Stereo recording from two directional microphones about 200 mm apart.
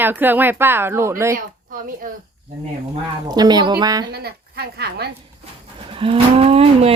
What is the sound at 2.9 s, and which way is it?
Speech, 20° right (ahead or behind).